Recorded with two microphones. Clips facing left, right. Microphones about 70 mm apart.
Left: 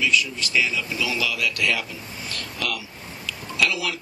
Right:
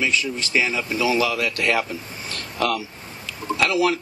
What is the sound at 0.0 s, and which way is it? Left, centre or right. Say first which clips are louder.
Speech: even; right.